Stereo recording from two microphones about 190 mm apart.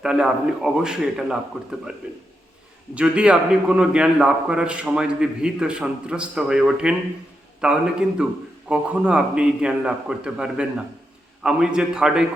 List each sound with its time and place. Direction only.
0.0 s a man's voice: 5° right (ahead or behind)
2.9 s a man's voice: 5° right (ahead or behind)